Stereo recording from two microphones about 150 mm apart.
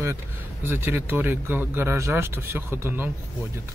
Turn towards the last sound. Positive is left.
turn(degrees=-15)  # may be behind; listen again after turning